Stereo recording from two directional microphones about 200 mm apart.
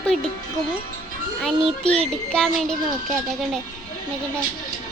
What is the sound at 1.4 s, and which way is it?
A child's voice, centre (ahead or behind).